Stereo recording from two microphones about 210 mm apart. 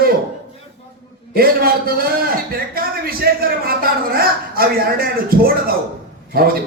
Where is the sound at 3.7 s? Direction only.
45° right (ahead or behind).